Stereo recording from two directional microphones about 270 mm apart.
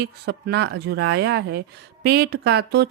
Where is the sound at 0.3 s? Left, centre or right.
Right.